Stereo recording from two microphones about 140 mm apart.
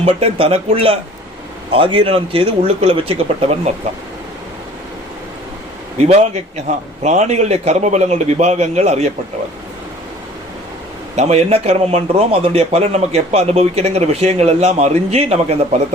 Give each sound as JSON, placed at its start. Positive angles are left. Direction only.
{"t": 0.0, "sound": "a man's voice", "side_deg": -45}
{"t": 6.0, "sound": "a man's voice", "side_deg": -50}
{"t": 11.2, "sound": "a man's voice", "side_deg": -45}